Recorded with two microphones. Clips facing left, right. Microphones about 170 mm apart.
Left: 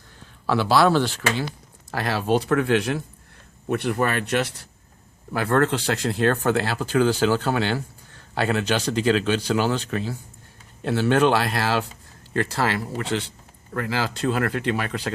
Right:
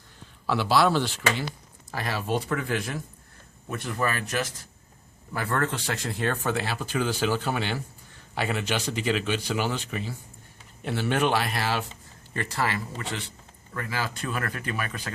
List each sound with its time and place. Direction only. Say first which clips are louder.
0.4 s speech: left 4 dB; 90° left
1.9 s speech: left 6 dB; 75° left (ahead or behind)
5.3 s speech: left 7 dB; 75° left (ahead or behind)
13.7 s speech: left 6 dB; 75° left (ahead or behind)